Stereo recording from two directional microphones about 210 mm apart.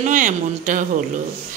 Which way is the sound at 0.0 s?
35° right (ahead or behind).